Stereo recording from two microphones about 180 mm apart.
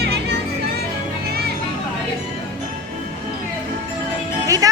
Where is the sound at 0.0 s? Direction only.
65° right (ahead or behind).